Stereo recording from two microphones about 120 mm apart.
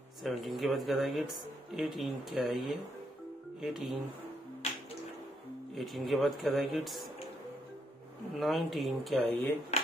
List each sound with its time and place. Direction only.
0.2 s speech: centre (ahead or behind)
5.8 s speech: centre (ahead or behind)
8.4 s speech: centre (ahead or behind)